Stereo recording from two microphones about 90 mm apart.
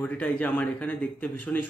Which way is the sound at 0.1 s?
15° left (ahead or behind).